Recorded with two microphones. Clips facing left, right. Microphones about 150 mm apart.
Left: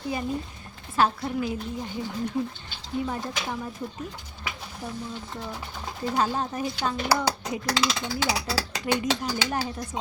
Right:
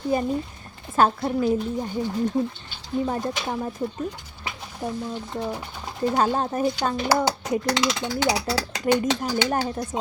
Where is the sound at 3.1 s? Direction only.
40° right (ahead or behind).